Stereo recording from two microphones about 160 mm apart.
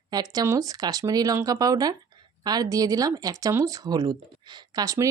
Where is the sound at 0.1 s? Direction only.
25° right (ahead or behind).